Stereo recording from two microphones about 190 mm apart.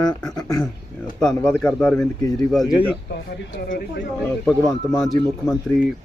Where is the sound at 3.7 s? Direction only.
50° left (ahead or behind).